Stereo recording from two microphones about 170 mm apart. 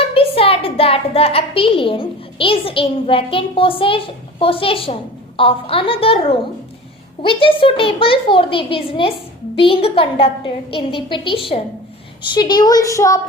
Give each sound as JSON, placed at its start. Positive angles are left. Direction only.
{"t": 0.1, "sound": "a woman's voice", "side_deg": 35}
{"t": 7.2, "sound": "a woman's voice", "side_deg": 30}